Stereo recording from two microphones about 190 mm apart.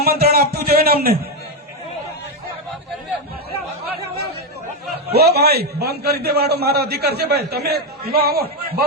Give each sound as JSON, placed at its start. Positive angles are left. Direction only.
{"t": 0.0, "sound": "speech", "side_deg": -55}
{"t": 5.1, "sound": "a man's voice", "side_deg": -55}